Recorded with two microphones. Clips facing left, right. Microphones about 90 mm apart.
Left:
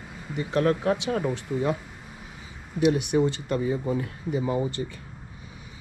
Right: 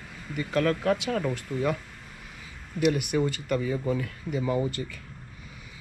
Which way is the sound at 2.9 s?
30° left (ahead or behind).